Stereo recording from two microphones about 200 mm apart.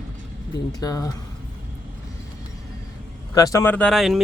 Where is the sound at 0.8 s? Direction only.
20° left (ahead or behind).